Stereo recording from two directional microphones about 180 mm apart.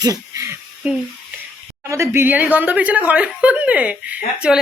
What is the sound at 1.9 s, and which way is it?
Speech, 15° right (ahead or behind).